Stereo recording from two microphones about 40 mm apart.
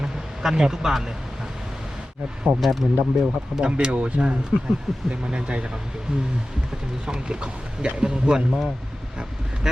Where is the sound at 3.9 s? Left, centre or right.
Right.